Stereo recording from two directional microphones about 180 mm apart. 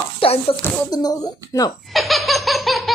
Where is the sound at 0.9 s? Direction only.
20° left (ahead or behind).